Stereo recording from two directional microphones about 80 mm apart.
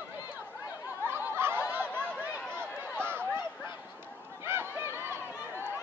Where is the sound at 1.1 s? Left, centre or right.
Right.